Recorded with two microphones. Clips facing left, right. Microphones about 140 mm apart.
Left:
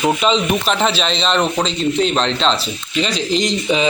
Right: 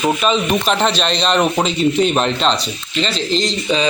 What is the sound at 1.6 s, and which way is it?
Speech, 15° right (ahead or behind).